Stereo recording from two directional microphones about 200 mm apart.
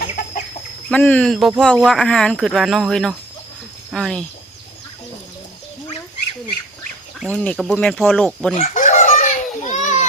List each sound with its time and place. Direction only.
0.9 s speech: 5° left (ahead or behind)
7.2 s speech: 5° left (ahead or behind)
8.5 s children playing: 40° left (ahead or behind)